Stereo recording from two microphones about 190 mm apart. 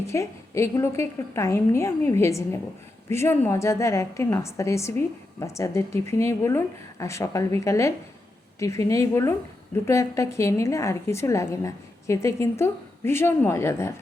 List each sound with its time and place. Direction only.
0.0 s a woman's voice: 15° left (ahead or behind)